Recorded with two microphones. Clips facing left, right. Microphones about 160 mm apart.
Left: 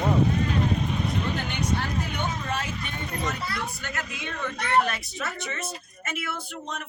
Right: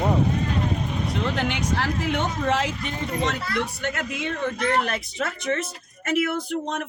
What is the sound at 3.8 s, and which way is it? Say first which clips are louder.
Speech: right 7 dB; 55° right (ahead or behind).